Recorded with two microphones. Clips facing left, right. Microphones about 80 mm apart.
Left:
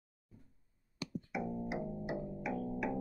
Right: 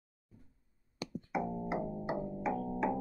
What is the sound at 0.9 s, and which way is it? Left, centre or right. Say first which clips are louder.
Music: right 3 dB; right.